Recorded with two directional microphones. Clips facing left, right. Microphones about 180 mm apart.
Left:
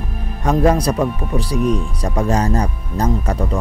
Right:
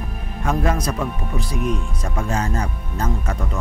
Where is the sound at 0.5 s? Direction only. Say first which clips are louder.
Left 7 dB; 35° left (ahead or behind).